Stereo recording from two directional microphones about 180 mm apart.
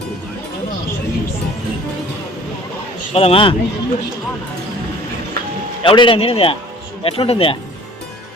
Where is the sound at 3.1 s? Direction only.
30° left (ahead or behind).